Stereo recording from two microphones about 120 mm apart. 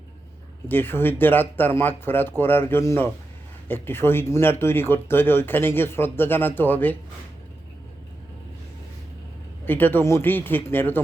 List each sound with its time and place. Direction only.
0.7 s speech: 15° left (ahead or behind)
9.6 s speech: 15° left (ahead or behind)